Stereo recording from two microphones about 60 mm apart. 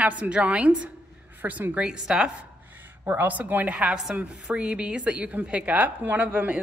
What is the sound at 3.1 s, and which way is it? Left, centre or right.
Speech, right.